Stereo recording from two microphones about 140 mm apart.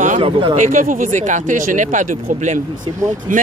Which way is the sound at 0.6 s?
65° right (ahead or behind).